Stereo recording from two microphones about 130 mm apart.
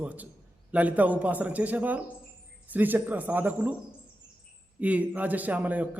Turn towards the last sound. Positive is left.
turn(degrees=-10)  # may be behind; listen again after turning